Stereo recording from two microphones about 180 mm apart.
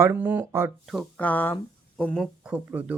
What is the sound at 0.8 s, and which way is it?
Speech, centre (ahead or behind).